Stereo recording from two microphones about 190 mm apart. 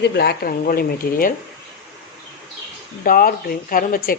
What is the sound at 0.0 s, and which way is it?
Speech, 60° left (ahead or behind).